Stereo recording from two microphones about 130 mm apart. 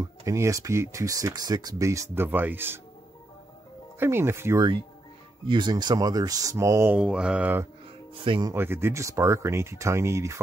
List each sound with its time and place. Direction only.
0.0 s speech: 25° right (ahead or behind)
4.0 s speech: 20° right (ahead or behind)
5.5 s speech: 35° right (ahead or behind)
7.0 s mantra: 5° right (ahead or behind)
8.1 s speech: 40° right (ahead or behind)
8.5 s speech: 15° right (ahead or behind)